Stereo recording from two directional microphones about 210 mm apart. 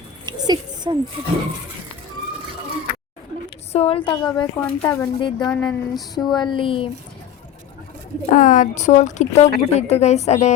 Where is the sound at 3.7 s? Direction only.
25° left (ahead or behind).